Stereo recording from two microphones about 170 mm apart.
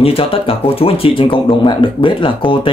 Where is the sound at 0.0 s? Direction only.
35° left (ahead or behind).